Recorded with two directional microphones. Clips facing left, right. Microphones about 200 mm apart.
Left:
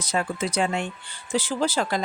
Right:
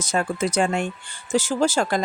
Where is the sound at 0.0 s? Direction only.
45° right (ahead or behind).